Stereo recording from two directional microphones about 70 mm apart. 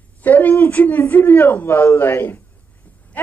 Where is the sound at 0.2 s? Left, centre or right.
Left.